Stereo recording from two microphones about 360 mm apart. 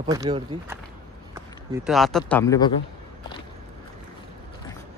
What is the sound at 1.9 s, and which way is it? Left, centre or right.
Speech, centre.